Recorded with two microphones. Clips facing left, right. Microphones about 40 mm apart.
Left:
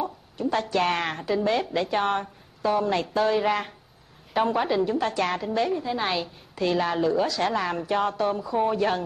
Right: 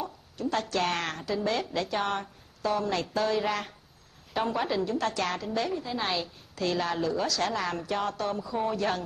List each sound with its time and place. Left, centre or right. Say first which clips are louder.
0.0 s a woman's voice: left 5 dB; centre